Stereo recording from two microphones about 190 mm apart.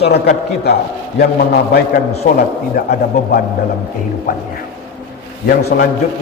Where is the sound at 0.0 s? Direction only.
55° left (ahead or behind).